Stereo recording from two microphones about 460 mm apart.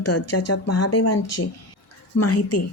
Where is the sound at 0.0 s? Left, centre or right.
Left.